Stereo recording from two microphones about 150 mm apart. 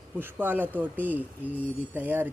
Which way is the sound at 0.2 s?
15° right (ahead or behind).